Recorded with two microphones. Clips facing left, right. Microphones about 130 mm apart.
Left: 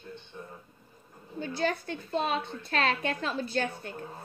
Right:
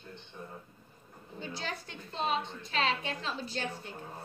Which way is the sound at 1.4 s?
50° left (ahead or behind).